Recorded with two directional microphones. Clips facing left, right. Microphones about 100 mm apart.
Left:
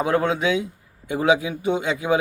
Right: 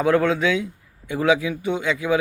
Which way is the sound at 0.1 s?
20° left (ahead or behind).